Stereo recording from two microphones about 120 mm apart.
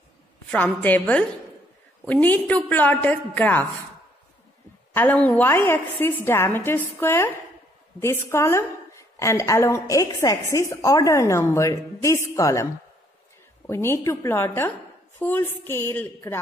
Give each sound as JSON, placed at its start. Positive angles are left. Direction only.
{"t": 0.5, "sound": "a woman's voice", "side_deg": 10}
{"t": 5.3, "sound": "a woman's voice", "side_deg": 20}
{"t": 13.7, "sound": "a woman's voice", "side_deg": 20}